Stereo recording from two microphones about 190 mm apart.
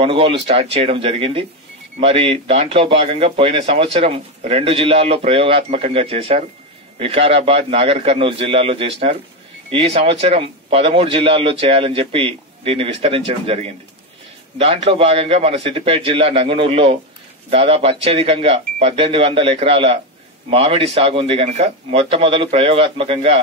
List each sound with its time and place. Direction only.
0.0 s a man's voice: 30° right (ahead or behind)